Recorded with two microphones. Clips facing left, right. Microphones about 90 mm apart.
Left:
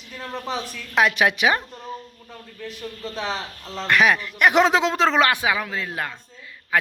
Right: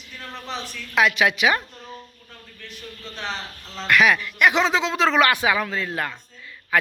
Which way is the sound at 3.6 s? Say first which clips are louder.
Even; 40° left (ahead or behind).